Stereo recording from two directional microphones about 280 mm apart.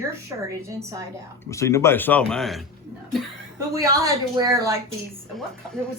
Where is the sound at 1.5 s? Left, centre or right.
Centre.